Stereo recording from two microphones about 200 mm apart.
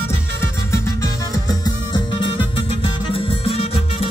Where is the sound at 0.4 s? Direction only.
15° left (ahead or behind).